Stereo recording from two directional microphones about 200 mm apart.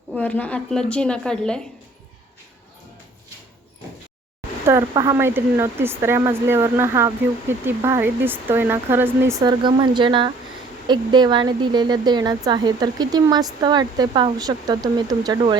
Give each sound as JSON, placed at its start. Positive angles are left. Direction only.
{"t": 0.1, "sound": "a woman's voice", "side_deg": 5}
{"t": 4.6, "sound": "speech", "side_deg": -15}